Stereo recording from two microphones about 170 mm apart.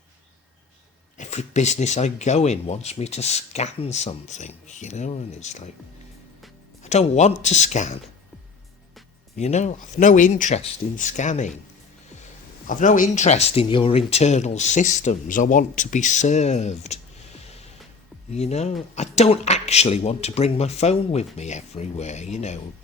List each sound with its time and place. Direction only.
1.1 s speech: 45° left (ahead or behind)
6.8 s speech: 40° left (ahead or behind)
9.3 s speech: 45° left (ahead or behind)
12.6 s speech: 50° left (ahead or behind)
18.3 s speech: 40° left (ahead or behind)